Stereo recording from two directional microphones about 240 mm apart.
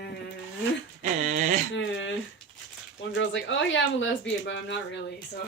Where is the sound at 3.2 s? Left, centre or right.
Left.